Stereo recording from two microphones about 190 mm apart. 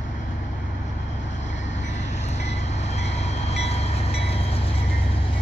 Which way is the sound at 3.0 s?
35° left (ahead or behind).